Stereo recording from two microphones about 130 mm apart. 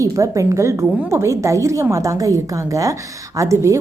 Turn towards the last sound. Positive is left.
turn(degrees=-25)  # may be behind; listen again after turning